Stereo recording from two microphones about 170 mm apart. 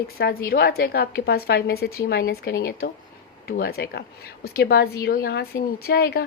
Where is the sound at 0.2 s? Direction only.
65° left (ahead or behind).